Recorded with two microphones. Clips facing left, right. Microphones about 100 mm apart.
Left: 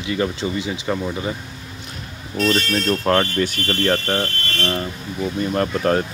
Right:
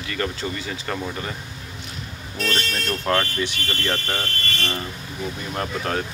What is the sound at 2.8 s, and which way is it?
Speech, 25° left (ahead or behind).